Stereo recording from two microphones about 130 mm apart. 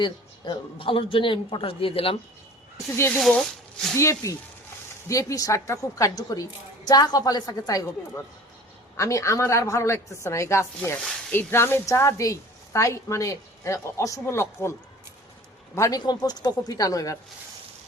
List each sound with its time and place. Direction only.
0.0 s a man's voice: 40° left (ahead or behind)
2.9 s a woman's voice: 20° left (ahead or behind)
3.2 s speech: centre (ahead or behind)
3.9 s a woman's voice: 25° left (ahead or behind)